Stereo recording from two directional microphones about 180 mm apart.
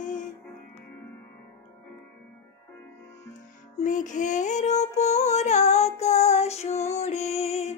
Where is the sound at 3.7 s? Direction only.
45° left (ahead or behind).